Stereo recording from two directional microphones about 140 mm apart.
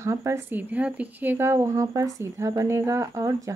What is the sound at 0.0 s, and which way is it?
Speech, 20° right (ahead or behind).